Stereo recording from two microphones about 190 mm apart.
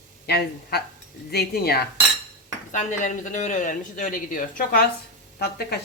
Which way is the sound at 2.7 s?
40° left (ahead or behind).